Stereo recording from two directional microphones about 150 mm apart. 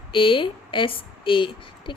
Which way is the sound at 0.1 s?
35° left (ahead or behind).